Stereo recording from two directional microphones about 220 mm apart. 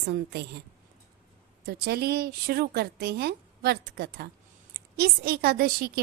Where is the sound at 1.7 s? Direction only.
45° right (ahead or behind).